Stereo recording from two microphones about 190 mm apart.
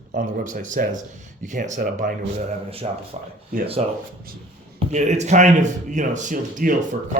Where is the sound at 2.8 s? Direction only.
30° right (ahead or behind).